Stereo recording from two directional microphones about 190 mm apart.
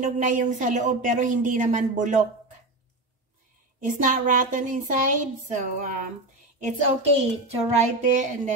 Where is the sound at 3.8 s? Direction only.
45° right (ahead or behind).